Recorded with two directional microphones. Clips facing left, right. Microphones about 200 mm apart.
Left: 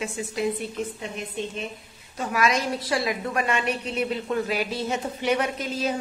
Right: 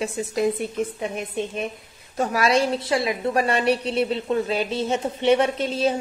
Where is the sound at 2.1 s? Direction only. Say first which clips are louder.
Right 4 dB; 35° right (ahead or behind).